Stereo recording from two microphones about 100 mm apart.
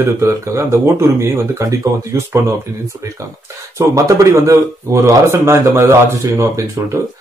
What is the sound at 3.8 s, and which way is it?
Speech, 30° right (ahead or behind).